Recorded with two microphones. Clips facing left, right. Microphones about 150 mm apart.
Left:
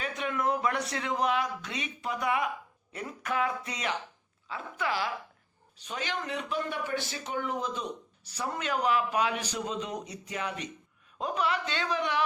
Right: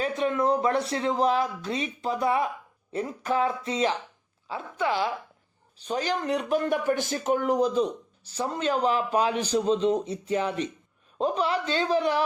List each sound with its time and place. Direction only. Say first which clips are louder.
0.0 s a man's voice: right 6 dB; 30° right (ahead or behind)